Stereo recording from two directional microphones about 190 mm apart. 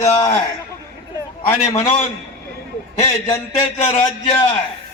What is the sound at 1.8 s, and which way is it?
Speech, 35° left (ahead or behind).